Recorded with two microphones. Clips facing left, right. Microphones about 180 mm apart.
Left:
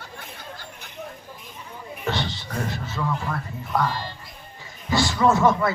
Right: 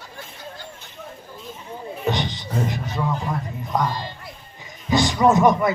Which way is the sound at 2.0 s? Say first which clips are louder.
Right 3 dB; 15° right (ahead or behind).